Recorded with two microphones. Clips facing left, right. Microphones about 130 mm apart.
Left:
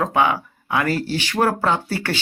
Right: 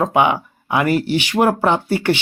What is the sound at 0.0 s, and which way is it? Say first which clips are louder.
Speech: right 3 dB; 20° right (ahead or behind).